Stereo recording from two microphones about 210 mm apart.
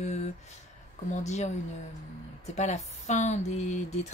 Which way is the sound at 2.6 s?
35° left (ahead or behind).